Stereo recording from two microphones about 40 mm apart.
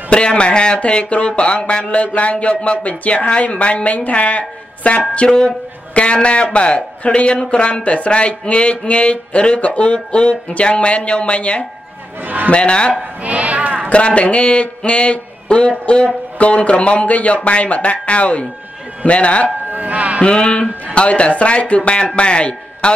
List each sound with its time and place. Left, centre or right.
0.1 s a man's voice: left
13.2 s a sound: right
13.9 s a man's voice: left
19.7 s speech: right
20.2 s a man's voice: left